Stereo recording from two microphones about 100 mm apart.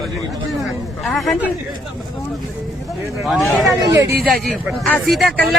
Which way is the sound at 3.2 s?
Centre (ahead or behind).